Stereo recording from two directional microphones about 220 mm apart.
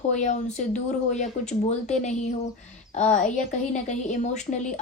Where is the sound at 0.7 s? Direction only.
35° left (ahead or behind).